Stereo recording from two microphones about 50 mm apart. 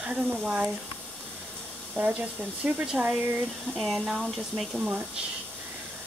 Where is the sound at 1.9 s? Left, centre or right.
Right.